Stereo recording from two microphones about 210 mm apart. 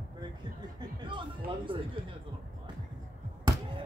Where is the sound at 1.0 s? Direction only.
20° right (ahead or behind).